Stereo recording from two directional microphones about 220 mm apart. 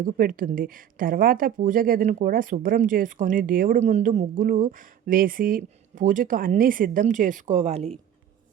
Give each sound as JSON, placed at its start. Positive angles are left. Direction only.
{"t": 0.0, "sound": "speech", "side_deg": -40}